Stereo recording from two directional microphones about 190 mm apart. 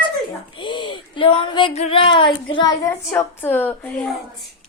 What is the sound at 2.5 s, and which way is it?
A woman's voice, 20° left (ahead or behind).